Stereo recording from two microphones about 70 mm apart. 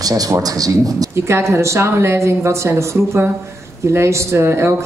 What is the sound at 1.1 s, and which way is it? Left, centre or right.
Speech, right.